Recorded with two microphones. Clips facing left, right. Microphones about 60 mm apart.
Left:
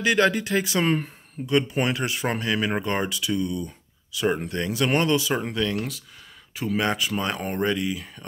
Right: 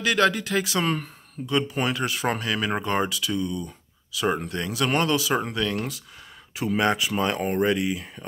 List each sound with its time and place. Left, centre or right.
0.0 s speech: centre
0.8 s speech: centre
1.4 s speech: centre